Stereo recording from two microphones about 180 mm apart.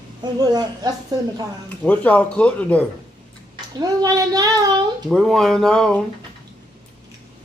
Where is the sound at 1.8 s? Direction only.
10° left (ahead or behind).